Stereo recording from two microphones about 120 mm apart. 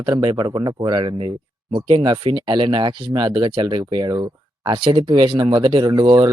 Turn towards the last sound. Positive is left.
turn(degrees=-40)  # may be behind; listen again after turning